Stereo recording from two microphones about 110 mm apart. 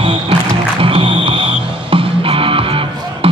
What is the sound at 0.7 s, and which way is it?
Music, 55° right (ahead or behind).